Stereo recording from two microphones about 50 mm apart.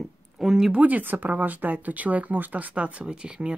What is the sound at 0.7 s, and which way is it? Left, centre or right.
Speech, right.